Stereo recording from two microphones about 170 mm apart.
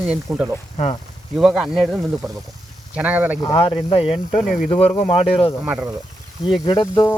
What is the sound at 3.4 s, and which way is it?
Speech, 30° left (ahead or behind).